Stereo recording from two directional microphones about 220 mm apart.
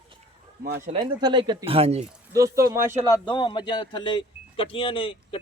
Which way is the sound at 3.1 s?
20° left (ahead or behind).